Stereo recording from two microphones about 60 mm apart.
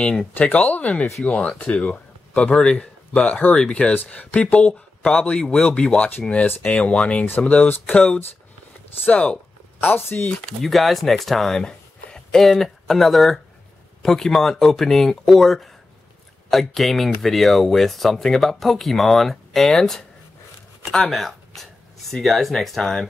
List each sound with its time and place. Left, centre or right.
0.3 s a man's voice: left
3.4 s speech: left
9.8 s speech: left
10.4 s speech: centre
21.1 s speech: centre